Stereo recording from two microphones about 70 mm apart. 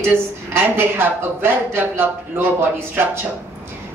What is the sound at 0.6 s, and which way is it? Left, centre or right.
Speech, right.